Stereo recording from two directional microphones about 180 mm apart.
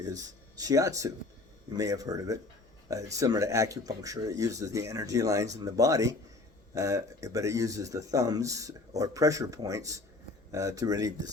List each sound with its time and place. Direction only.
0.0 s speech: 20° right (ahead or behind)